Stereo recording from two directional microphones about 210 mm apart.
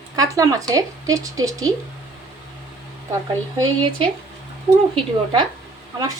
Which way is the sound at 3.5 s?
20° right (ahead or behind).